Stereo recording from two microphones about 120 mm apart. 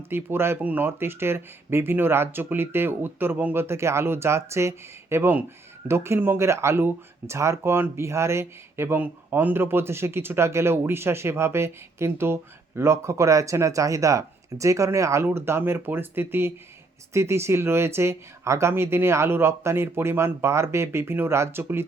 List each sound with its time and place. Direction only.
0.1 s speech: 20° right (ahead or behind)